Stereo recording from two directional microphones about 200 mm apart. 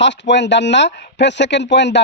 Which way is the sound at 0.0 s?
60° left (ahead or behind).